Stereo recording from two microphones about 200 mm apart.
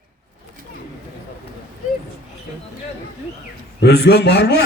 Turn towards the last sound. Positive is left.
turn(degrees=55)  # may be behind; listen again after turning